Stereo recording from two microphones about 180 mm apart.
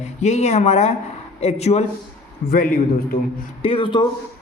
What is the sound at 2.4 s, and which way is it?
Speech, 50° left (ahead or behind).